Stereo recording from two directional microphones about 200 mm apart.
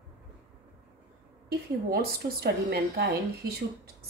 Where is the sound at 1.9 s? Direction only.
50° right (ahead or behind).